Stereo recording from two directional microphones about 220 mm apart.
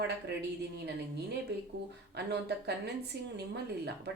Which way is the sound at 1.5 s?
50° right (ahead or behind).